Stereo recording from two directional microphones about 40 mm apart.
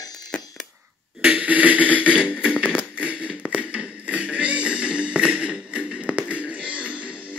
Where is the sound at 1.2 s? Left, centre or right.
Right.